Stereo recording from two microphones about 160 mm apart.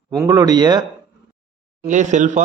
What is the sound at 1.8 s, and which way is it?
Speech, 50° right (ahead or behind).